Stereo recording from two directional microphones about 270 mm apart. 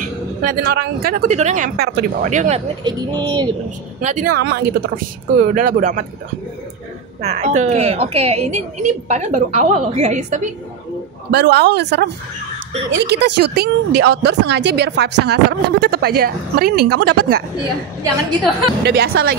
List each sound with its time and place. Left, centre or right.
0.4 s a woman's voice: right; by 3.4 s centre
4.0 s a woman's voice: right
7.2 s a woman's voice: right
11.3 s a woman's voice: right
18.9 s a woman's voice: right